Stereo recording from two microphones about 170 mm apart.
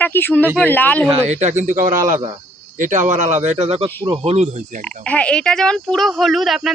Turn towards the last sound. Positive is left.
turn(degrees=0)  # may be behind; listen again after turning